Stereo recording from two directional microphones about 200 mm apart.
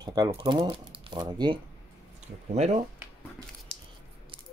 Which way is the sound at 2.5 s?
35° right (ahead or behind).